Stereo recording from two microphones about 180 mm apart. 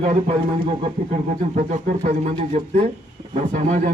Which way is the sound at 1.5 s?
45° right (ahead or behind).